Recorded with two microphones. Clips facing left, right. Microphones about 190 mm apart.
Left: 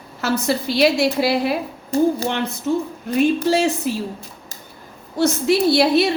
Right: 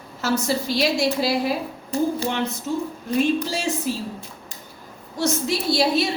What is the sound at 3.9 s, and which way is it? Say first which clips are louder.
Speech: left 3 dB; 65° left (ahead or behind).